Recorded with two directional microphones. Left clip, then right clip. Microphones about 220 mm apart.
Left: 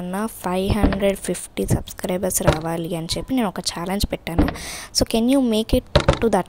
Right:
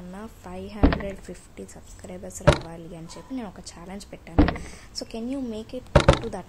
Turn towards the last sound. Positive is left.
turn(degrees=40)  # may be behind; listen again after turning